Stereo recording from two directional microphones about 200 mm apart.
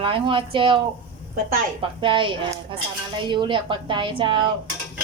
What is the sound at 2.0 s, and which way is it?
Stir, 25° right (ahead or behind).